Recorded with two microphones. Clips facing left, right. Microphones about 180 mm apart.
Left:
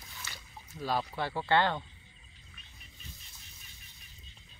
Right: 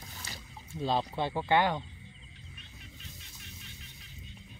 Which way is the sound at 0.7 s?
25° right (ahead or behind).